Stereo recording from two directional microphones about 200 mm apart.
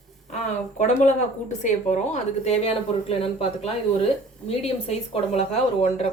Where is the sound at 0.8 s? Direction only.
35° left (ahead or behind).